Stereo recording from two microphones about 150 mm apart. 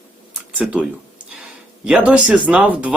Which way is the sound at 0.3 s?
5° right (ahead or behind).